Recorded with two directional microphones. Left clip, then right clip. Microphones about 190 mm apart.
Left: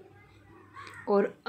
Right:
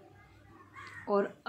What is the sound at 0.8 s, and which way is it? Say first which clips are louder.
Crow: left 4 dB; 10° left (ahead or behind).